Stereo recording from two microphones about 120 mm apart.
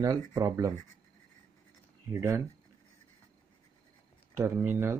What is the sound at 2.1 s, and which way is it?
Speech, 25° right (ahead or behind).